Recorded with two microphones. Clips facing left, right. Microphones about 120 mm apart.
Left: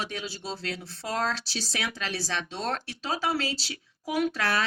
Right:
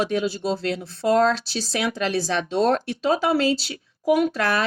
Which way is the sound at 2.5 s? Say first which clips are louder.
Right 12 dB; 25° right (ahead or behind).